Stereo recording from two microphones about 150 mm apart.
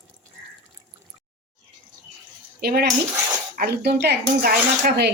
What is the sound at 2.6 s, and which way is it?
Speech, 90° right.